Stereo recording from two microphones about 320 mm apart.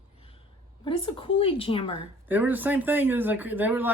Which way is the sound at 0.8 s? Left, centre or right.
Centre.